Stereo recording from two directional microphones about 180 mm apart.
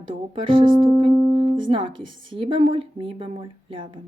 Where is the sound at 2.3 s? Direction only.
30° right (ahead or behind).